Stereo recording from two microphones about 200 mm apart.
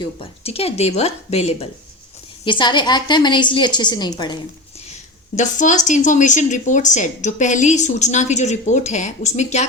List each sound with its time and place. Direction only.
0.0 s a woman's voice: 30° left (ahead or behind)
5.3 s a woman's voice: 40° left (ahead or behind)